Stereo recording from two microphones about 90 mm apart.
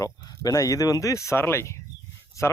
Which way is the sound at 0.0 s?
40° left (ahead or behind).